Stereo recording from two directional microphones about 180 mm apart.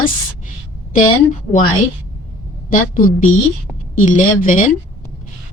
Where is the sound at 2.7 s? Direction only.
45° left (ahead or behind).